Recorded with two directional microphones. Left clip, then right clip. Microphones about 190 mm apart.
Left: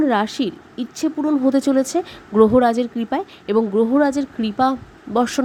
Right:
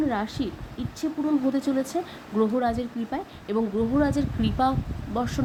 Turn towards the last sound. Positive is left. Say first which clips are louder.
# left 10 dB
turn(degrees=40)  # may be behind; listen again after turning